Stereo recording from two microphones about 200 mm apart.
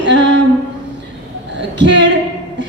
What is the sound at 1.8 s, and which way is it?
Speech, 60° right (ahead or behind).